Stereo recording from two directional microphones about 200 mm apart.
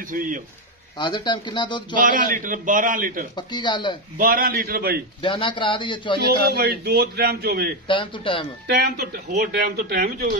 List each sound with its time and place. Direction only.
0.9 s a man's voice: 20° left (ahead or behind)
2.0 s speech: 45° right (ahead or behind)
3.3 s a man's voice: 20° left (ahead or behind)
4.2 s speech: 45° right (ahead or behind)
5.2 s a man's voice: 25° left (ahead or behind)
6.4 s speech: 50° right (ahead or behind)
7.9 s a man's voice: 25° left (ahead or behind)
8.6 s speech: 55° right (ahead or behind)